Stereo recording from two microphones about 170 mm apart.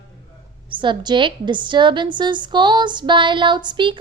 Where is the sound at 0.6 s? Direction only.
30° right (ahead or behind).